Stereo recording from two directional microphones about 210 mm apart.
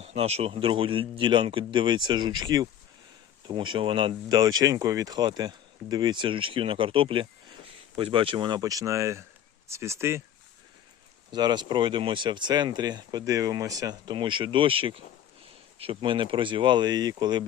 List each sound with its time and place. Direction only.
0.0 s speech: 30° right (ahead or behind); by 10.2 s 15° right (ahead or behind)
11.3 s speech: 20° right (ahead or behind)